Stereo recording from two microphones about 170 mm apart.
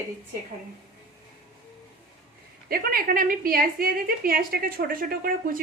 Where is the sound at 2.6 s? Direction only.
60° right (ahead or behind).